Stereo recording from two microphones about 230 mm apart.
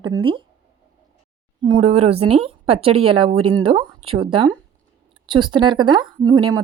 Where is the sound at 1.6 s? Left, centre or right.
Right.